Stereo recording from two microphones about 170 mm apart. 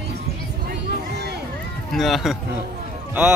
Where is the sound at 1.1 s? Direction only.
75° right (ahead or behind).